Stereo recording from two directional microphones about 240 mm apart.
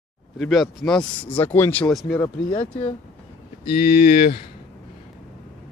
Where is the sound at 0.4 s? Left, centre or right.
Centre.